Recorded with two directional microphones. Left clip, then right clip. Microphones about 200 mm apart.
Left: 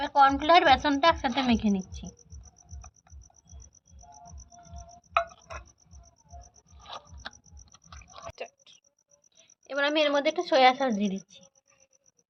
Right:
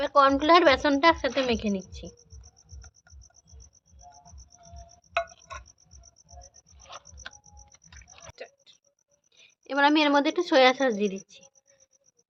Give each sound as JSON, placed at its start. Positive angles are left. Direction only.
{"t": 0.0, "sound": "a woman's voice", "side_deg": -40}
{"t": 6.4, "sound": "cricket", "side_deg": 0}
{"t": 7.7, "sound": "a sound", "side_deg": -5}
{"t": 8.4, "sound": "oink", "side_deg": 20}
{"t": 9.4, "sound": "a woman's voice", "side_deg": -40}